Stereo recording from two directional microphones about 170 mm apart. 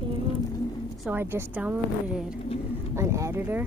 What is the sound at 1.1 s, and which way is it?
Speech, 10° right (ahead or behind).